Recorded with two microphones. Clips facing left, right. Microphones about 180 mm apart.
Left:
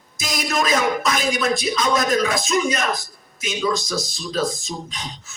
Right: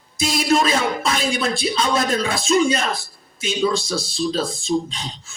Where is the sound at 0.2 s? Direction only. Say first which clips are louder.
Right 5 dB; 30° right (ahead or behind).